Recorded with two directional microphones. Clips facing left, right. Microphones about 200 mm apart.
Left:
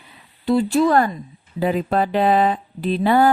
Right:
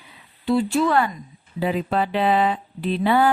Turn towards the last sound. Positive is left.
turn(degrees=40)  # may be behind; listen again after turning